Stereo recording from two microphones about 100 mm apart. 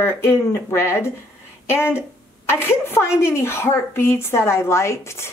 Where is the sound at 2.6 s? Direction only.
25° left (ahead or behind).